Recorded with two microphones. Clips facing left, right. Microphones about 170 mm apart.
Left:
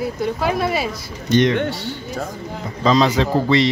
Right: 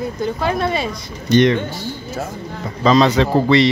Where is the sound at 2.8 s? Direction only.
65° right (ahead or behind).